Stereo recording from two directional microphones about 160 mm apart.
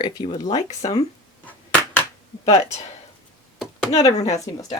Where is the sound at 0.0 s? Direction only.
30° left (ahead or behind).